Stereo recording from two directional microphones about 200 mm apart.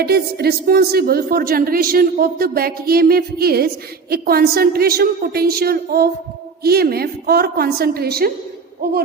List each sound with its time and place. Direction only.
0.0 s speech: 50° right (ahead or behind)